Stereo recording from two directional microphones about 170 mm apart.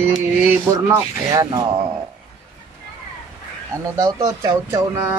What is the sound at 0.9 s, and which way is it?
Speech, 20° right (ahead or behind).